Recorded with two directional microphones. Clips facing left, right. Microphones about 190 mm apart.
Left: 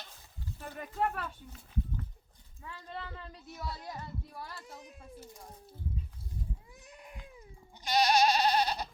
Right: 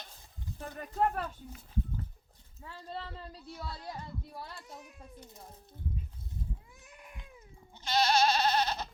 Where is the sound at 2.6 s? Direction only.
30° right (ahead or behind).